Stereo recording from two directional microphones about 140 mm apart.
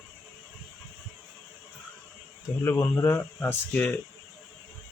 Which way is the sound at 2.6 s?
15° left (ahead or behind).